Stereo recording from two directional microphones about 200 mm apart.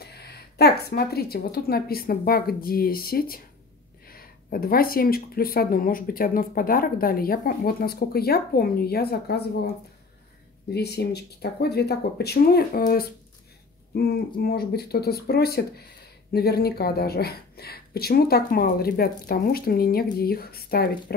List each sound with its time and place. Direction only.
0.0 s speech: 55° left (ahead or behind)
10.7 s speech: 55° left (ahead or behind)